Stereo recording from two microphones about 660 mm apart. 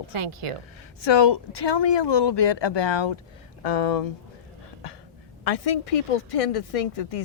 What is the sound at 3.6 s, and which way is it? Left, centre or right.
Speech, left.